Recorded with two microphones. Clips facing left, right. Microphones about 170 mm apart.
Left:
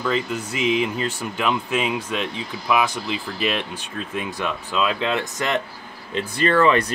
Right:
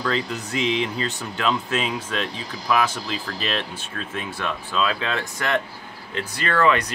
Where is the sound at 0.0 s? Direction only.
10° left (ahead or behind).